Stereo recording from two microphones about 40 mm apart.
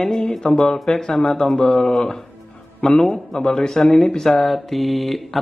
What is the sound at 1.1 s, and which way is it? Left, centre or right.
Speech, centre.